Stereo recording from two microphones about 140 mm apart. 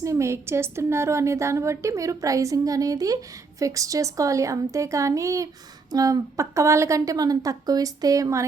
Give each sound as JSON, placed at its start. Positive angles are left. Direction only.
{"t": 0.0, "sound": "a woman's voice", "side_deg": -20}